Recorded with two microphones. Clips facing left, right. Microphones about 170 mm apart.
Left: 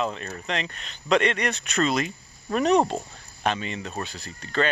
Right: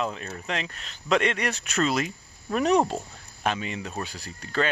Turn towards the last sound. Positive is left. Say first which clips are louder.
# left 1 dB
turn(degrees=-10)  # may be behind; listen again after turning